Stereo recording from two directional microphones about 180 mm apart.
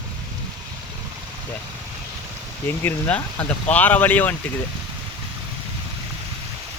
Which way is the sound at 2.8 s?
10° left (ahead or behind).